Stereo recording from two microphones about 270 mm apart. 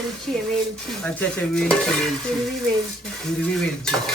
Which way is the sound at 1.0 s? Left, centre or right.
Centre.